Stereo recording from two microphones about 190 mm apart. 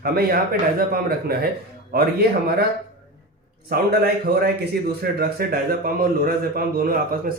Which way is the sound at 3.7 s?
55° right (ahead or behind).